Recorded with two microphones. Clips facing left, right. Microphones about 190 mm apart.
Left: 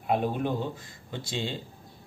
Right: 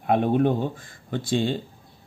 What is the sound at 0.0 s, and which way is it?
Speech, 55° right (ahead or behind).